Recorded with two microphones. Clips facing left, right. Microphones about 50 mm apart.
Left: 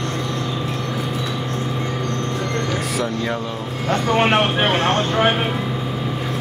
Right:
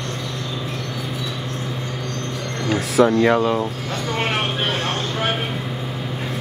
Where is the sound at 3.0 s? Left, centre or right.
Right.